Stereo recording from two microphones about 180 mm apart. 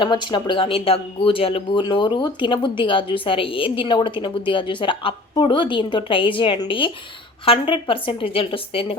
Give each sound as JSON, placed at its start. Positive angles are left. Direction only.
{"t": 0.0, "sound": "speech", "side_deg": 25}